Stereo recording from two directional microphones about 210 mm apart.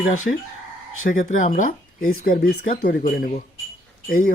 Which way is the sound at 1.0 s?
40° left (ahead or behind).